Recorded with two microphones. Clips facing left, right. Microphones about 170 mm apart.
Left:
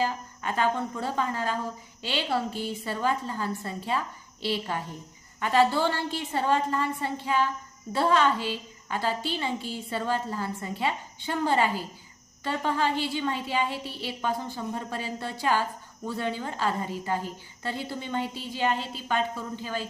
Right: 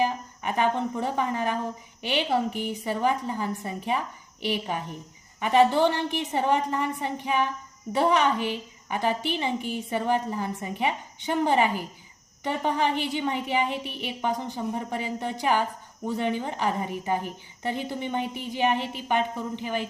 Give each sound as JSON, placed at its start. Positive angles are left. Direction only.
{"t": 0.0, "sound": "a woman's voice", "side_deg": -20}